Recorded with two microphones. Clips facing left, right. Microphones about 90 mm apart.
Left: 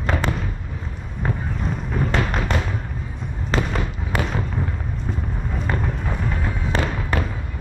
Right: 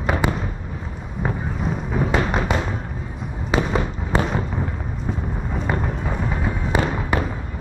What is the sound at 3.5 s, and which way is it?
Fireworks, 5° right (ahead or behind).